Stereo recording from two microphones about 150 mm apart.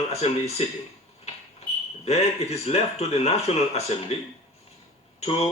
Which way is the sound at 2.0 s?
45° left (ahead or behind).